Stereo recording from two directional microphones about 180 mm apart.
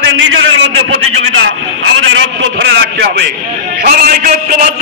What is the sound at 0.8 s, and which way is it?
A man's voice, 90° right.